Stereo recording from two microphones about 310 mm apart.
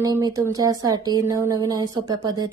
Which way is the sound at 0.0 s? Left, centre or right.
Centre.